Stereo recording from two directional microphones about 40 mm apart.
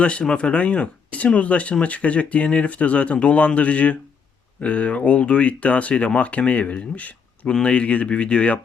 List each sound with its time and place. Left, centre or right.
0.0 s speech: left
5.9 s speech: left
6.1 s speech: left